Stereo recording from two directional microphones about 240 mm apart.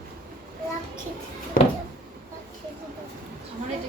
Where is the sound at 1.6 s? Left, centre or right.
Left.